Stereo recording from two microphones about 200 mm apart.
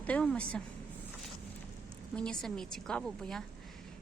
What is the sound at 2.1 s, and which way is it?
Speech, 5° left (ahead or behind).